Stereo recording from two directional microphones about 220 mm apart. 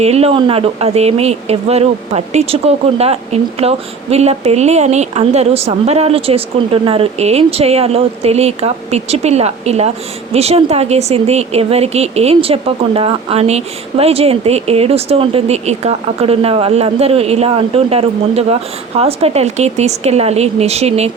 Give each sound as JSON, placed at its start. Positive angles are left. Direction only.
{"t": 0.0, "sound": "speech", "side_deg": -30}